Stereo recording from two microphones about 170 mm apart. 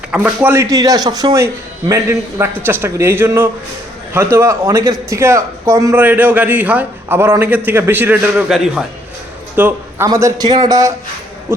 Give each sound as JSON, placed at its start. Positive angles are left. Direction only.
{"t": 0.1, "sound": "a man's voice", "side_deg": -10}
{"t": 10.1, "sound": "speech", "side_deg": -20}